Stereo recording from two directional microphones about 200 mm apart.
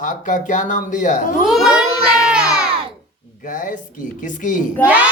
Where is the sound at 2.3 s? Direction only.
5° right (ahead or behind).